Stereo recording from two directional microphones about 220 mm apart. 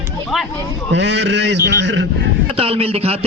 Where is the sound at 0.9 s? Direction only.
50° right (ahead or behind).